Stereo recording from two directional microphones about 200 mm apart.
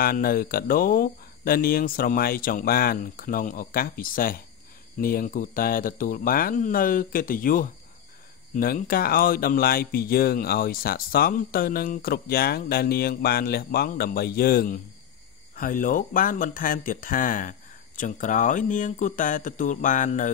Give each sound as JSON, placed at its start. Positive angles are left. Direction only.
{"t": 0.0, "sound": "speech", "side_deg": 45}